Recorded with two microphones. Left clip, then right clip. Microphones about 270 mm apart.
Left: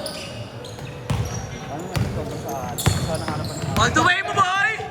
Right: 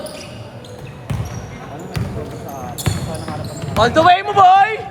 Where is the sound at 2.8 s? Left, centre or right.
Centre.